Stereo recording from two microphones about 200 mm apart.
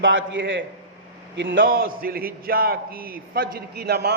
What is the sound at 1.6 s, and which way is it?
A man's voice, 45° right (ahead or behind).